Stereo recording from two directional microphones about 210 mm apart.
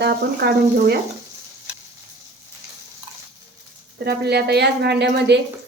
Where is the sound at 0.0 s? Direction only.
50° right (ahead or behind).